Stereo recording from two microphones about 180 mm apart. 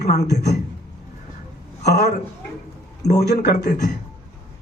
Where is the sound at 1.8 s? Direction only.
65° left (ahead or behind).